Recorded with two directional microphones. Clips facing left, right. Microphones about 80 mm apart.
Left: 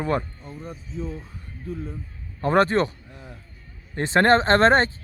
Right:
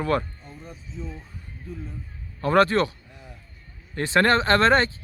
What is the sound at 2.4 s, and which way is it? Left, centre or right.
Speech, left.